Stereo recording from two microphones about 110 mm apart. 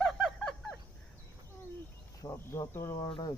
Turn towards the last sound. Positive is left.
turn(degrees=45)  # may be behind; listen again after turning